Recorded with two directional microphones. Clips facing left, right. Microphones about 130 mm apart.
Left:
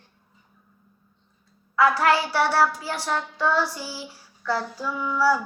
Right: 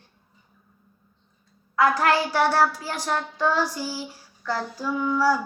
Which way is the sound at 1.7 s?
45° right (ahead or behind).